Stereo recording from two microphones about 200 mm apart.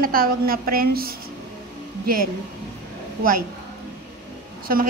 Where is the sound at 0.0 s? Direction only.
45° right (ahead or behind).